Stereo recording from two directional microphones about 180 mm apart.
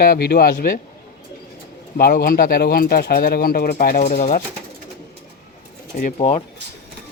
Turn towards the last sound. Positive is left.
turn(degrees=30)  # may be behind; listen again after turning